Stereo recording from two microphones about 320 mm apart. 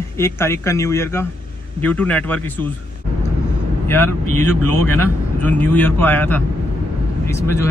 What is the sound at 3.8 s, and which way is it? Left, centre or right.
Vehicle, centre.